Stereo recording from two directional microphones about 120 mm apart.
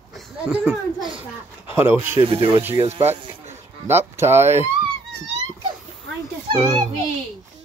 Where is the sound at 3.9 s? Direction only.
20° right (ahead or behind).